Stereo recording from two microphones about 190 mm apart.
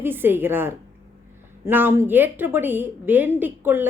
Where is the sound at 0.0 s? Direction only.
10° right (ahead or behind).